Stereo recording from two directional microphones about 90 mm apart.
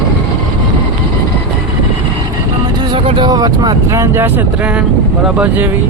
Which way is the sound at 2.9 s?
75° right (ahead or behind).